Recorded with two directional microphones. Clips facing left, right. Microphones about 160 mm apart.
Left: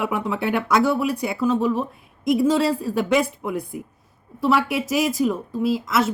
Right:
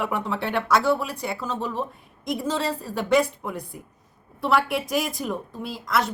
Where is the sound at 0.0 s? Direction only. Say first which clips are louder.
Left 3 dB; 10° left (ahead or behind).